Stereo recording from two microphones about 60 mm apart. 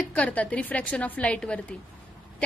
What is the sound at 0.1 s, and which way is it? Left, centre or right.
A woman's voice, left.